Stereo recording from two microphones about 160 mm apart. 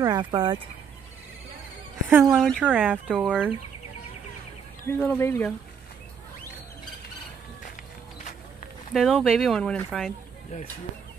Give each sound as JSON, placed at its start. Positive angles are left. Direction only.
{"t": 0.0, "sound": "speech", "side_deg": -25}
{"t": 2.0, "sound": "speech", "side_deg": -5}
{"t": 3.1, "sound": "speech", "side_deg": 0}
{"t": 4.8, "sound": "speech", "side_deg": 10}
{"t": 8.9, "sound": "speech", "side_deg": 0}